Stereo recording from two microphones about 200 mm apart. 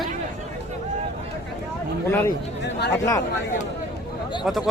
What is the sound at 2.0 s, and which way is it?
Speech, 15° left (ahead or behind).